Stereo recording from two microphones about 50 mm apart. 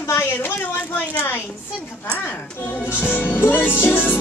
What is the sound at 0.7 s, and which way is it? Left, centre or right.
Speech, left.